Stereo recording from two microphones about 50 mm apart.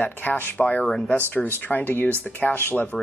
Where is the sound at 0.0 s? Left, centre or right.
Left.